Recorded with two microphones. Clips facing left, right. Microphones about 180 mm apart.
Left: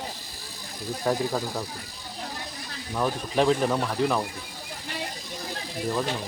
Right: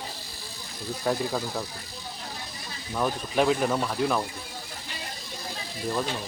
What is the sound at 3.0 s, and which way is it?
Speech, 5° right (ahead or behind).